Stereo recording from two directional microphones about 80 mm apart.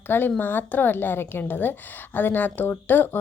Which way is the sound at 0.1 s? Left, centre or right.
Left.